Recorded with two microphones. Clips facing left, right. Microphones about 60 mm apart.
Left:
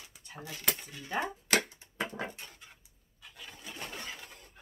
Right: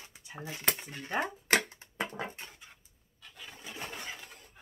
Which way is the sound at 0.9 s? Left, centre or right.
Right.